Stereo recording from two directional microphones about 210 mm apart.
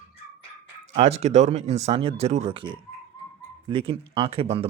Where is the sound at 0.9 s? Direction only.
30° right (ahead or behind).